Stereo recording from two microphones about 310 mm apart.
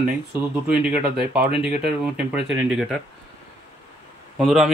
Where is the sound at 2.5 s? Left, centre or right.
Centre.